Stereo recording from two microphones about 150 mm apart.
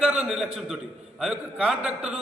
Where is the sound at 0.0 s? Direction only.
5° right (ahead or behind).